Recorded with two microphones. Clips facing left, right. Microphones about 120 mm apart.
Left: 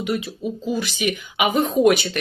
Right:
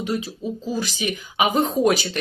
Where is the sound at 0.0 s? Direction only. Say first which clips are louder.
Left 1 dB; 30° right (ahead or behind).